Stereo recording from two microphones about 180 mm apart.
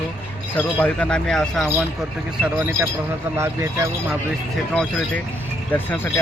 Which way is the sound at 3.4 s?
15° right (ahead or behind).